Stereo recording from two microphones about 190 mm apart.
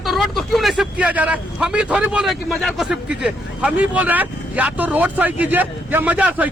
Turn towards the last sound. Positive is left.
turn(degrees=-10)  # may be behind; listen again after turning